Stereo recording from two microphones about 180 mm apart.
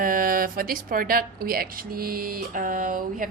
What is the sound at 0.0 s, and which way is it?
A woman's voice, 50° right (ahead or behind).